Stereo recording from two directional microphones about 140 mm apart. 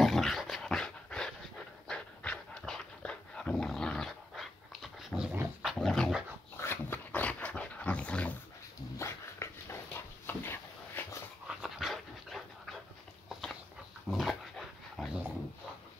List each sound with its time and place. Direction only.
0.0 s dog: centre (ahead or behind)
6.6 s dog: 15° left (ahead or behind)
8.9 s dog: 20° left (ahead or behind)
11.4 s dog: 5° right (ahead or behind)
13.3 s a sound: centre (ahead or behind)
14.1 s dog: centre (ahead or behind)